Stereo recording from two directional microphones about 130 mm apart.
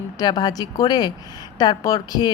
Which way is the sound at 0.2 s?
30° left (ahead or behind).